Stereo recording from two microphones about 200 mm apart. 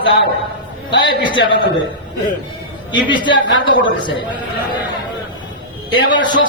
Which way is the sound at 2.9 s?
25° left (ahead or behind).